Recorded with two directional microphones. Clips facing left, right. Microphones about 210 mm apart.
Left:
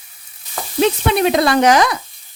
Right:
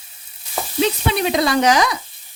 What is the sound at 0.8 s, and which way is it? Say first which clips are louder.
Speech: left 4 dB; 55° left (ahead or behind).